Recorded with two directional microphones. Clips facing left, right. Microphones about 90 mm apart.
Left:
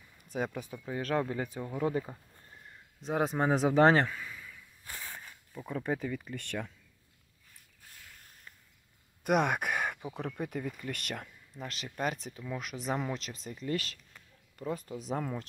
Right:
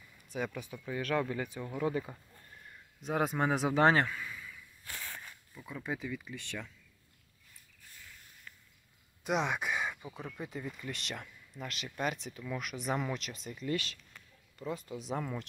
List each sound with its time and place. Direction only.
0.3 s a man's voice: 40° left (ahead or behind)
1.6 s a man's voice: 25° left (ahead or behind)
4.8 s a sound: 5° left (ahead or behind)
5.9 s speech: 45° left (ahead or behind)
9.2 s a sound: 55° left (ahead or behind)
10.3 s speech: 55° left (ahead or behind)
11.6 s a man's voice: 35° left (ahead or behind)